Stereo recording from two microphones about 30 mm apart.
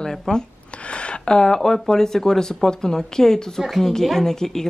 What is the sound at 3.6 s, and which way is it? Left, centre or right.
Speech, centre.